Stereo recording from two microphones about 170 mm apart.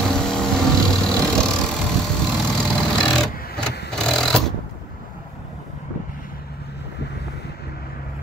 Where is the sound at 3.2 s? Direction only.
5° left (ahead or behind).